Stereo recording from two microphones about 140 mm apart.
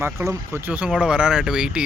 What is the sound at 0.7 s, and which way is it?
Speech, 10° right (ahead or behind).